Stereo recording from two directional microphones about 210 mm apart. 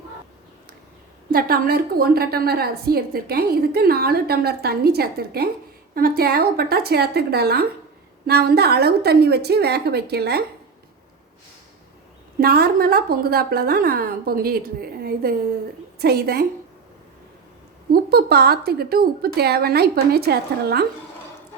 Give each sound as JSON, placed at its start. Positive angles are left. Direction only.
{"t": 1.3, "sound": "a woman's voice", "side_deg": -45}
{"t": 12.4, "sound": "a woman's voice", "side_deg": -45}
{"t": 17.9, "sound": "a woman's voice", "side_deg": -50}